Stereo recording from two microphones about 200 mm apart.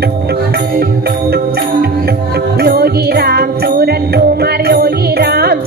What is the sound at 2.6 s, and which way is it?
Music, 50° right (ahead or behind).